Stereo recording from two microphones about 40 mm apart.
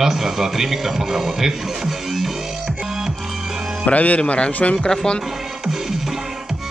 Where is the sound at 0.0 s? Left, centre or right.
Centre.